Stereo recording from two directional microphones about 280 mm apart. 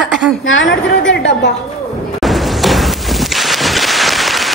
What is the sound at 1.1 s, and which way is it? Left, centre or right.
Speech, left.